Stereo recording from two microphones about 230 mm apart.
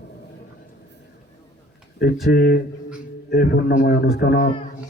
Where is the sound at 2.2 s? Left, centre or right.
Left.